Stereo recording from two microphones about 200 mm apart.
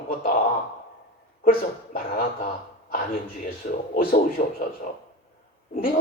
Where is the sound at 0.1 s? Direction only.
45° left (ahead or behind).